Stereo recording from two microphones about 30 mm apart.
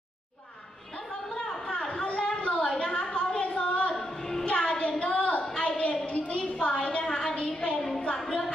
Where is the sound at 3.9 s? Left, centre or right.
Centre.